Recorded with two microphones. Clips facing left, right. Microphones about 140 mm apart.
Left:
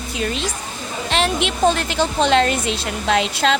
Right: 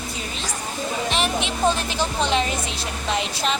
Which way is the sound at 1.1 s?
70° left (ahead or behind).